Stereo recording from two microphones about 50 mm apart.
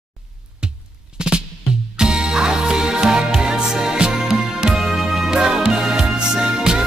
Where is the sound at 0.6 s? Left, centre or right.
Centre.